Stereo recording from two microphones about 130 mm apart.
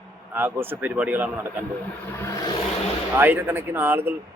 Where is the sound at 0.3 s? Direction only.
15° right (ahead or behind).